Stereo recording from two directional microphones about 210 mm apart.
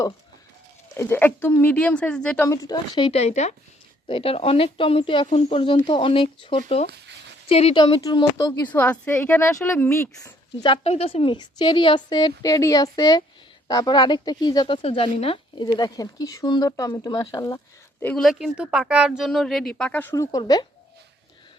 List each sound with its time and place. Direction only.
0.9 s speech: 10° left (ahead or behind)
10.7 s speech: 30° left (ahead or behind)
18.0 s speech: 5° left (ahead or behind); by 20.7 s 20° left (ahead or behind)